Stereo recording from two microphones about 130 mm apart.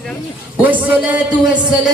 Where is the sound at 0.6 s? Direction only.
10° right (ahead or behind).